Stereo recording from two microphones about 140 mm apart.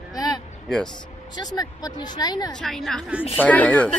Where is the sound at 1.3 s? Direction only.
30° left (ahead or behind).